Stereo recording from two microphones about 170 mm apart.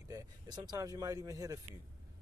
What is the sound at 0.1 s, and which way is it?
Speech, 20° right (ahead or behind).